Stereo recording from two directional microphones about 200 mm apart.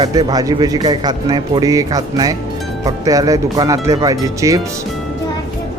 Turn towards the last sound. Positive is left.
turn(degrees=-15)  # may be behind; listen again after turning